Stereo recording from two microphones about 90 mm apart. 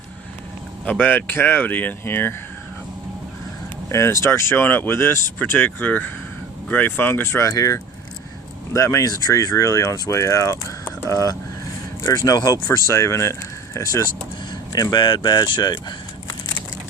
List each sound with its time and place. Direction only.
0.9 s speech: 20° left (ahead or behind)
3.8 s speech: 30° left (ahead or behind); by 12.5 s 50° left (ahead or behind)
12.6 s speech: 35° left (ahead or behind)
14.5 s speech: 45° left (ahead or behind)